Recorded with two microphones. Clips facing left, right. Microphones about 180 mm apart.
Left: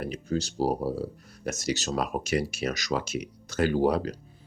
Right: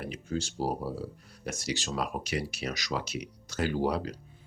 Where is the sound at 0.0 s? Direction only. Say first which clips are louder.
Left 4 dB; 40° left (ahead or behind).